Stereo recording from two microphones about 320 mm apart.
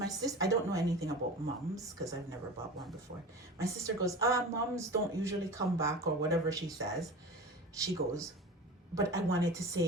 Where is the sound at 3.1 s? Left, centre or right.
Right.